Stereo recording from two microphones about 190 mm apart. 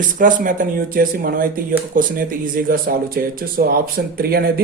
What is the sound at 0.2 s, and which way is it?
Speech, 45° right (ahead or behind).